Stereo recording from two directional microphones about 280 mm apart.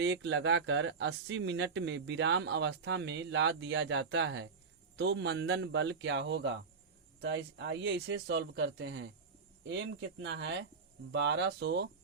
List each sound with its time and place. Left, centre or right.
0.0 s speech: right